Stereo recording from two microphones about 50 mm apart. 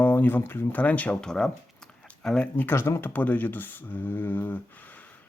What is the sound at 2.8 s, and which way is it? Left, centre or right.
Speech, left.